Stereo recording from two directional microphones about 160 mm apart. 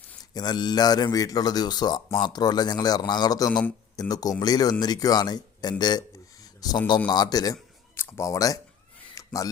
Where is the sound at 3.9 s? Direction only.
25° left (ahead or behind).